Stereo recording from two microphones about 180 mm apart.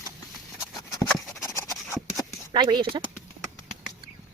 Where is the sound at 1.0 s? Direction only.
20° left (ahead or behind).